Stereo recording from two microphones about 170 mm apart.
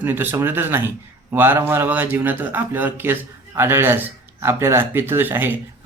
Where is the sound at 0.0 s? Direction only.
10° right (ahead or behind).